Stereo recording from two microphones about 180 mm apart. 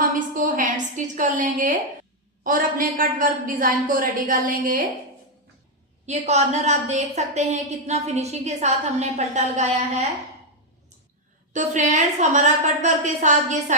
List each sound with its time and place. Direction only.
0.3 s a woman's voice: 50° right (ahead or behind)
6.1 s a woman's voice: 40° right (ahead or behind)
11.5 s a woman's voice: 40° right (ahead or behind)